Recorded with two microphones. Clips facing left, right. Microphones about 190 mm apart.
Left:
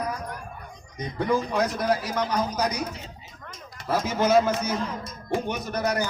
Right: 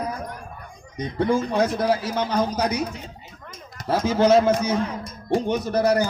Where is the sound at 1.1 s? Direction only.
30° right (ahead or behind).